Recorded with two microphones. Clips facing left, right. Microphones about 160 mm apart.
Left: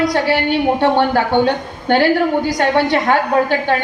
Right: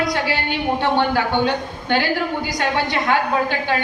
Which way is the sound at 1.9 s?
50° left (ahead or behind).